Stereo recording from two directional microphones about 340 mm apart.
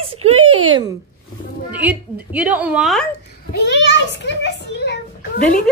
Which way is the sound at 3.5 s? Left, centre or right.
Left.